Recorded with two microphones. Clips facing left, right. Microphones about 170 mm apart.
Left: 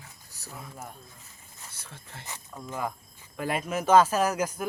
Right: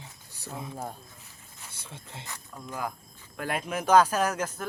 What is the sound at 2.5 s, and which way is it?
Speech, centre (ahead or behind).